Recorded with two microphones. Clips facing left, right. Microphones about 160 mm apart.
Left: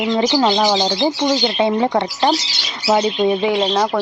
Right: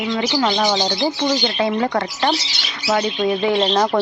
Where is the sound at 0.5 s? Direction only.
5° left (ahead or behind).